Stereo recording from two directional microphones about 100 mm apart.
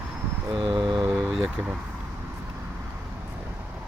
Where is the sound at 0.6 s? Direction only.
50° right (ahead or behind).